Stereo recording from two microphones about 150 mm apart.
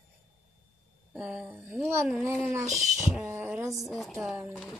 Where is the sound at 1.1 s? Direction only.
5° right (ahead or behind).